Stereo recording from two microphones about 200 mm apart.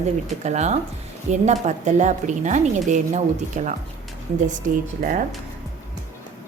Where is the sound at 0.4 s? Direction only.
35° right (ahead or behind).